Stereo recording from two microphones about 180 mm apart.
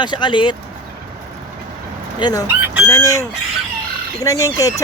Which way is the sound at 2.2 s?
20° left (ahead or behind).